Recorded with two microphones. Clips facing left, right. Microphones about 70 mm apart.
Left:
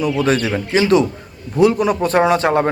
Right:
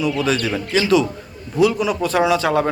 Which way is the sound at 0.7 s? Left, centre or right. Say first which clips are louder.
Left 3 dB; left.